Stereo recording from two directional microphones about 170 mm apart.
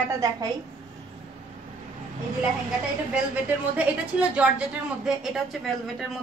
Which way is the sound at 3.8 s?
5° right (ahead or behind).